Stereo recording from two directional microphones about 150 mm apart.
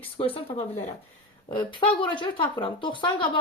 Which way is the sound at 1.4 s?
35° left (ahead or behind).